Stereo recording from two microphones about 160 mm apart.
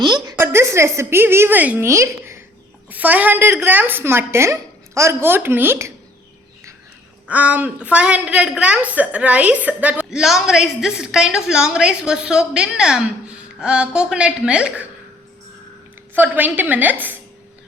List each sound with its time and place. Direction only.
0.0 s a sound: 25° right (ahead or behind)
0.3 s a woman's voice: 15° right (ahead or behind)
7.3 s a woman's voice: 10° right (ahead or behind)
16.1 s a woman's voice: 10° right (ahead or behind)